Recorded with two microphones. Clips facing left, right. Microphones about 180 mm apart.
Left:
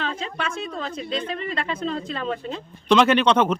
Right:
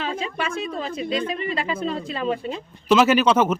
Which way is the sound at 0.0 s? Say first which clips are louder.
Right 2 dB; 10° right (ahead or behind).